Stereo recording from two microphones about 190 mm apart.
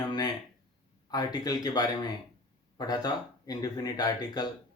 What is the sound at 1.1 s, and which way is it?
Speech, 20° left (ahead or behind).